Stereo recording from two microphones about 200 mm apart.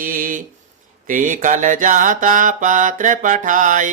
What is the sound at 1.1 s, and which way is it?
Mantra, 40° right (ahead or behind).